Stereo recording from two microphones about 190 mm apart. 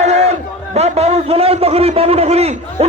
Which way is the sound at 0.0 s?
35° right (ahead or behind).